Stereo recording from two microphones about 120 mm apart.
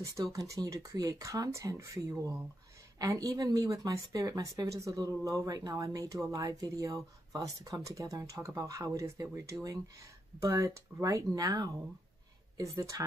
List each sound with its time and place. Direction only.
0.0 s speech: 30° right (ahead or behind)